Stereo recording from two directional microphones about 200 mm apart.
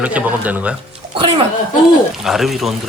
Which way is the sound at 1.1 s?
30° right (ahead or behind).